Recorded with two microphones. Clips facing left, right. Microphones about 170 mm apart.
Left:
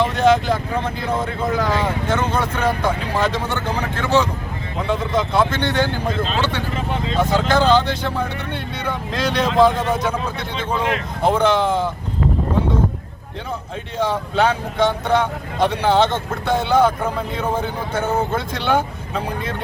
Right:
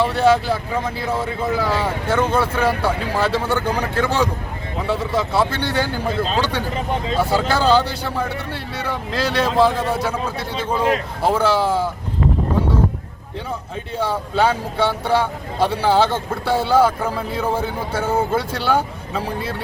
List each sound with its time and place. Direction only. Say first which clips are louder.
0.0 s speech: even; 10° right (ahead or behind)
7.2 s speech: left 2 dB; 10° right (ahead or behind)
10.8 s speech: right 4 dB; 35° right (ahead or behind)
11.2 s speech: left 3 dB; 5° right (ahead or behind)
14.0 s speech: left 1 dB; 10° right (ahead or behind)